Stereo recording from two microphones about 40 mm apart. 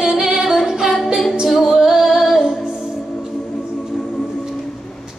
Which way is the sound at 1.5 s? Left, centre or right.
Centre.